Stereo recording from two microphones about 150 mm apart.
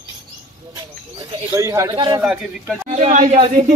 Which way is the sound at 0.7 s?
20° right (ahead or behind).